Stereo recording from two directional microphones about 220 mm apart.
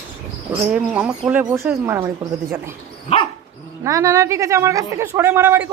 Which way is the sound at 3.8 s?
15° right (ahead or behind).